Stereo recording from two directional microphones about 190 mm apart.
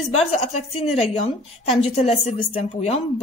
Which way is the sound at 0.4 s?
30° left (ahead or behind).